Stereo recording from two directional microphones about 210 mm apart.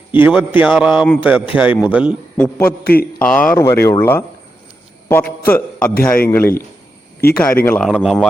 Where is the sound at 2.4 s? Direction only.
10° left (ahead or behind).